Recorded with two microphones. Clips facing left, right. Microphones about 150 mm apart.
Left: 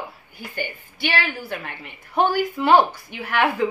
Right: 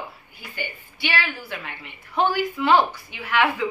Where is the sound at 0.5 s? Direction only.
45° left (ahead or behind).